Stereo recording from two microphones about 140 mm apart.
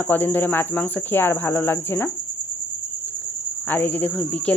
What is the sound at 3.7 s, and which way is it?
Speech, 15° left (ahead or behind).